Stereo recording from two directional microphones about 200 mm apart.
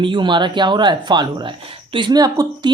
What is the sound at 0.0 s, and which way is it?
Speech, 25° right (ahead or behind).